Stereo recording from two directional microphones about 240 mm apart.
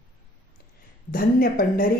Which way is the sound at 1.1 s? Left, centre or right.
Left.